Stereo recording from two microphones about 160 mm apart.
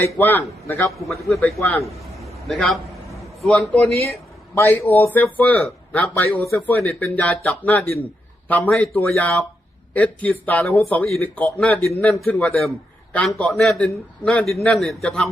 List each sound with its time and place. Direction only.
0.0 s a man's voice: 10° left (ahead or behind)
2.2 s a sound: centre (ahead or behind)
3.4 s a man's voice: 5° left (ahead or behind)
4.5 s a man's voice: 15° left (ahead or behind)